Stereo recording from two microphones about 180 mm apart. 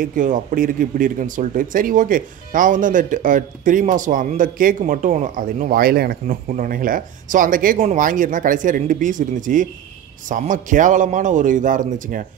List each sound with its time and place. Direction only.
0.0 s speech: 50° right (ahead or behind)